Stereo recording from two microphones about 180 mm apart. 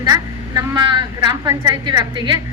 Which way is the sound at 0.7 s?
25° right (ahead or behind).